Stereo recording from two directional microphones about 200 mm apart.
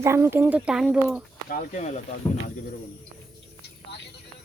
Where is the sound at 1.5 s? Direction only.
40° left (ahead or behind).